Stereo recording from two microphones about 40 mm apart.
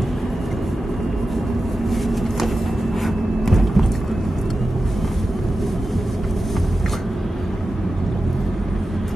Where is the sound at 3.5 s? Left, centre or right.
Centre.